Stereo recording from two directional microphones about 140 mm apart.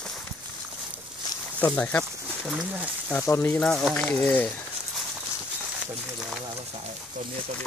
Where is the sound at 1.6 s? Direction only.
10° left (ahead or behind).